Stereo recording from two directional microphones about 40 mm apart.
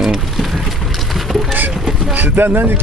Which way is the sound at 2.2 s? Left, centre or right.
Right.